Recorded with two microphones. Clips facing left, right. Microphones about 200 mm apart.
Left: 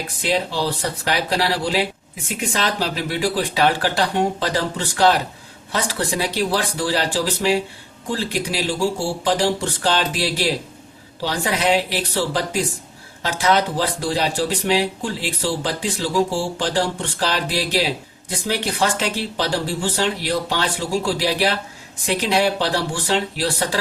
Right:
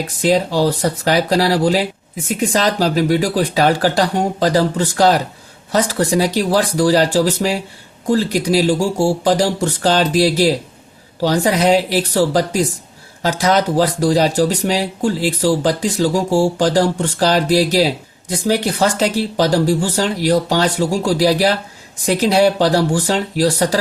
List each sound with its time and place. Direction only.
0.2 s speech: 40° right (ahead or behind)